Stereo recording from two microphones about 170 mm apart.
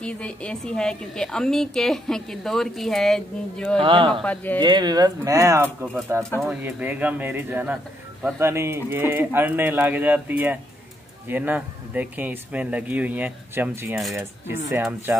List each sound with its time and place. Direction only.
0.0 s a woman's voice: 5° left (ahead or behind)
3.8 s speech: 30° right (ahead or behind)
4.1 s speech: 5° left (ahead or behind)
4.6 s speech: 25° right (ahead or behind)